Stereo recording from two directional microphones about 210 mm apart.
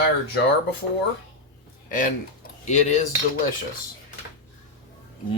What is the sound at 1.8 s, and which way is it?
Speech, 40° left (ahead or behind).